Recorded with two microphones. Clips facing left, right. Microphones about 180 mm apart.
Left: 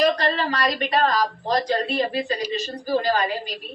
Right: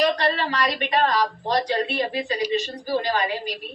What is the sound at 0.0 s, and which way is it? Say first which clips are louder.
Speech: left 1 dB; 40° left (ahead or behind).